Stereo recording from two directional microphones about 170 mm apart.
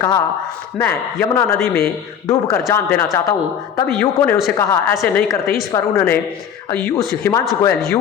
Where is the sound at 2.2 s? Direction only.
20° left (ahead or behind).